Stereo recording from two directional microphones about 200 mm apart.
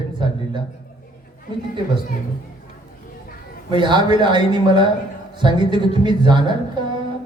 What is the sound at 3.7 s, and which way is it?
A man's voice, 25° right (ahead or behind).